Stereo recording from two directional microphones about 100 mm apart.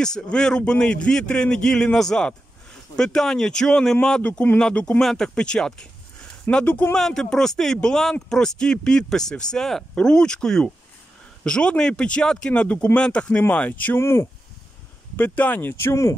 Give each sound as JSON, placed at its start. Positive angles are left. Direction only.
{"t": 0.0, "sound": "speech", "side_deg": 5}
{"t": 7.0, "sound": "speech", "side_deg": 5}
{"t": 13.9, "sound": "speech", "side_deg": 25}